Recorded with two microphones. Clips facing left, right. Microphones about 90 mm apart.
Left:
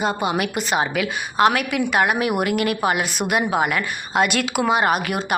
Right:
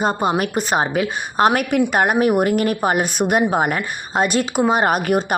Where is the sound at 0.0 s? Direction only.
40° right (ahead or behind).